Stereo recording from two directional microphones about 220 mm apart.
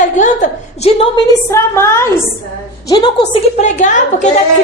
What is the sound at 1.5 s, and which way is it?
A woman's voice, 10° left (ahead or behind).